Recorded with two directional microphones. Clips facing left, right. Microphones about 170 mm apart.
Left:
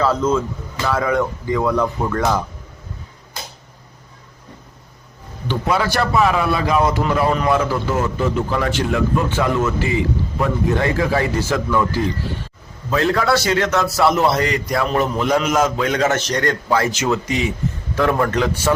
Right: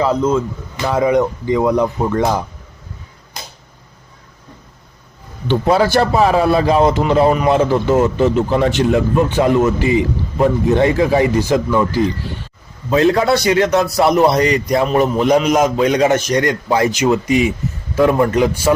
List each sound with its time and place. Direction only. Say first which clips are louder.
0.0 s a man's voice: right 2 dB; 15° right (ahead or behind)
5.5 s a man's voice: right 6 dB; 30° right (ahead or behind); by 18.7 s 10° right (ahead or behind)